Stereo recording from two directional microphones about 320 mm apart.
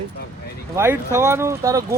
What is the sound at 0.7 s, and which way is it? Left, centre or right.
Speech, centre.